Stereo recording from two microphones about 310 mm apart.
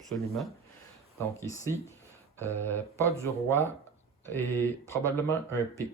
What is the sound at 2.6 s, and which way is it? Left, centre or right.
Speech, centre.